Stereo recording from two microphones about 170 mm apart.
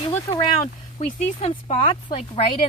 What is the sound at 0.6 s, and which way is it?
Speech, 40° left (ahead or behind).